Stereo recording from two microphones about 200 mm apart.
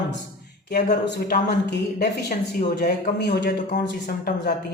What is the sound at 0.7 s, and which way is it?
A woman's voice, 55° left (ahead or behind).